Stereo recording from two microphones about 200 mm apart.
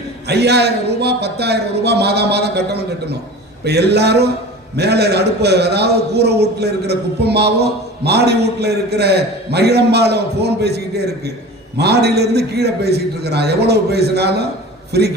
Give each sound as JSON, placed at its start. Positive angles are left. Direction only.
{"t": 0.3, "sound": "a man's voice", "side_deg": -55}